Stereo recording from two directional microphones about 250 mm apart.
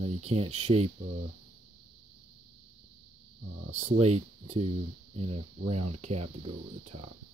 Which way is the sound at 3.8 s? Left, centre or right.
Right.